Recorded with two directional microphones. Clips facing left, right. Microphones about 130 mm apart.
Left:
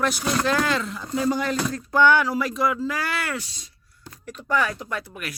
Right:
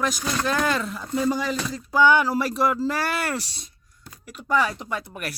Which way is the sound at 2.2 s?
30° right (ahead or behind).